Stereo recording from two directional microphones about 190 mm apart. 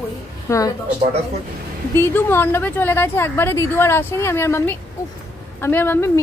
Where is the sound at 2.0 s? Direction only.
10° left (ahead or behind).